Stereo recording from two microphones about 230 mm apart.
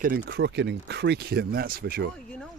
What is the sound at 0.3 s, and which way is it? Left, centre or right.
Speech, right.